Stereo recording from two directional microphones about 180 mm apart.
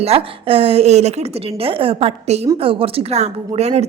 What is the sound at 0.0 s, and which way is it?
A woman's voice, 30° right (ahead or behind).